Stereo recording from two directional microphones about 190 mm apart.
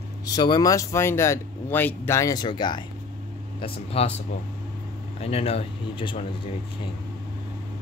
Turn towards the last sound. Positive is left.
turn(degrees=30)  # may be behind; listen again after turning